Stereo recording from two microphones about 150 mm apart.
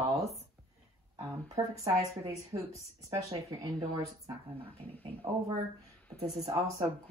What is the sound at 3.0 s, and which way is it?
Speech, 25° right (ahead or behind).